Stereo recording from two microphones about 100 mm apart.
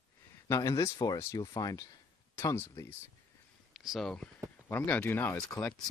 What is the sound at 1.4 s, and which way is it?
Speech, 40° left (ahead or behind).